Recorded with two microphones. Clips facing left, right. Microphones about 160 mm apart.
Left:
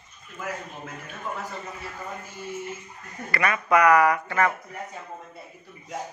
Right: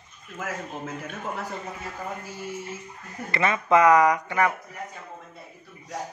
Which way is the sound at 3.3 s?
25° right (ahead or behind).